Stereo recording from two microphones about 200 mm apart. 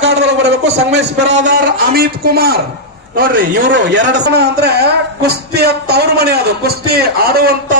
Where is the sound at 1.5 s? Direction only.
50° right (ahead or behind).